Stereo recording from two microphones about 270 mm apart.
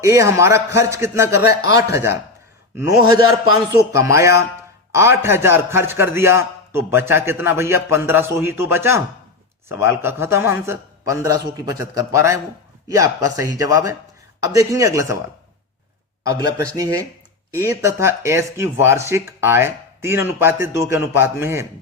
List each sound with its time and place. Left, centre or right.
0.0 s speech: centre
16.2 s speech: centre